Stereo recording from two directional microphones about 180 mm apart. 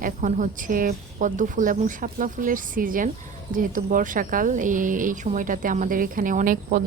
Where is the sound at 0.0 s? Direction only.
45° right (ahead or behind).